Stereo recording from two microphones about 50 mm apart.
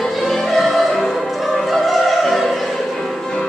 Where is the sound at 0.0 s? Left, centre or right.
Centre.